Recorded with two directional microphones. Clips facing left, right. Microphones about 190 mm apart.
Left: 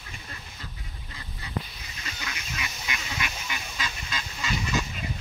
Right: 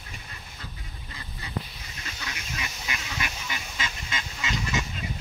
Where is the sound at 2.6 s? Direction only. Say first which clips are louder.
Even; 35° right (ahead or behind).